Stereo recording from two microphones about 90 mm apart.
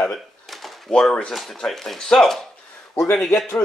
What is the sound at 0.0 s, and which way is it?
Speech, 5° left (ahead or behind).